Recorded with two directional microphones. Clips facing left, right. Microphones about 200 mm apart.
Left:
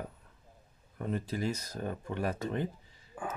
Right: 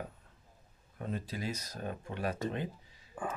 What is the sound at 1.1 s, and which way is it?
Speech, 50° left (ahead or behind).